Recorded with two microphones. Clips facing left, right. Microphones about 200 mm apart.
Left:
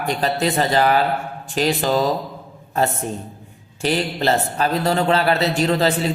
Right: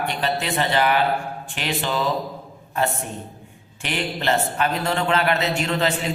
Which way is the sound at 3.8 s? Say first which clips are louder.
Left 6 dB; 35° left (ahead or behind).